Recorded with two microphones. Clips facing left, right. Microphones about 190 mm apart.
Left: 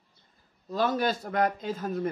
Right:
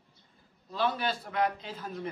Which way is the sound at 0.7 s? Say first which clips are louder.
Left 4 dB; 45° left (ahead or behind).